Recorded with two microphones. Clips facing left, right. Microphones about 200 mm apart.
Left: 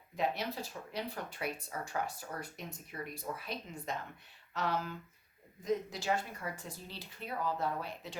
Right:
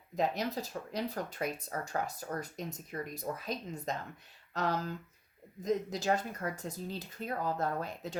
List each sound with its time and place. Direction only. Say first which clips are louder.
0.2 s speech: right 3 dB; 40° right (ahead or behind)